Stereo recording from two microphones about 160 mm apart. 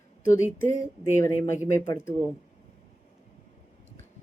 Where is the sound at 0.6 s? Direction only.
15° left (ahead or behind).